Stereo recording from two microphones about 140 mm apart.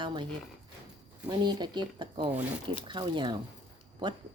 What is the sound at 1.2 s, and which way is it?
Speech, 30° right (ahead or behind).